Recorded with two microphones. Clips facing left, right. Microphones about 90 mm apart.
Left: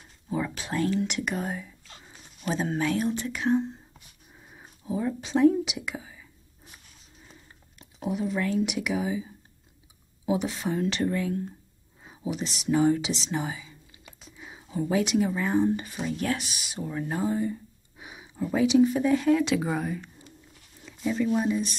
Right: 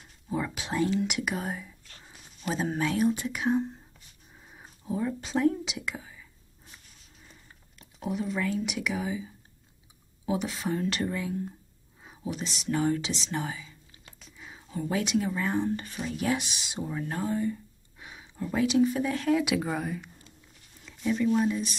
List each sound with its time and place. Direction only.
0.3 s whispering: centre (ahead or behind)
0.7 s speech: 15° right (ahead or behind)
4.4 s speech: 5° left (ahead or behind)
8.0 s speech: centre (ahead or behind)
16.3 s speech: 20° right (ahead or behind)
17.0 s speech: 10° left (ahead or behind)
21.1 s speech: 5° left (ahead or behind)